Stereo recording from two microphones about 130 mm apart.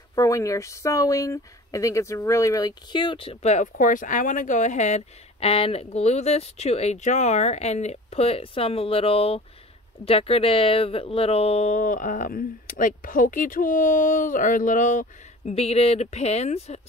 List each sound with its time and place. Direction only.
0.1 s speech: 25° left (ahead or behind); by 3.3 s 40° left (ahead or behind)
3.4 s speech: 80° left
15.5 s speech: 50° left (ahead or behind)